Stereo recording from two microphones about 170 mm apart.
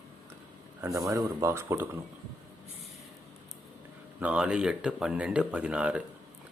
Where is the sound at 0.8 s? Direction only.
15° right (ahead or behind).